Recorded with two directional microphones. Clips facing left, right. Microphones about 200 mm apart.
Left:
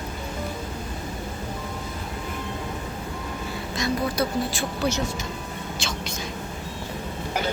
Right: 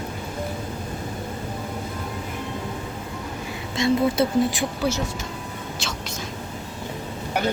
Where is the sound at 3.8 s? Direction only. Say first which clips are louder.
Right 5 dB; 25° right (ahead or behind).